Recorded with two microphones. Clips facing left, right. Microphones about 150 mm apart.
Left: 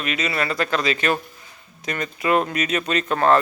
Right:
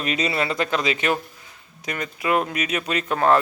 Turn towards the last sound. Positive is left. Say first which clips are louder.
# left 1 dB
turn(degrees=-10)  # may be behind; listen again after turning